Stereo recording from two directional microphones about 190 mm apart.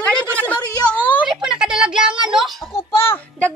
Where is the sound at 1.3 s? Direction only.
5° right (ahead or behind).